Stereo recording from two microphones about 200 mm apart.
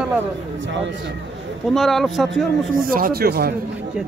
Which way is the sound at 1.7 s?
Centre (ahead or behind).